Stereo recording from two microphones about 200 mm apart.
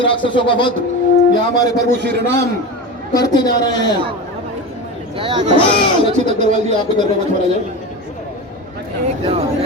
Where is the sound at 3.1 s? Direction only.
20° left (ahead or behind).